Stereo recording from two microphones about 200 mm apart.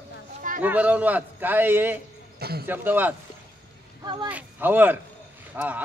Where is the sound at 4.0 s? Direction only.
20° right (ahead or behind).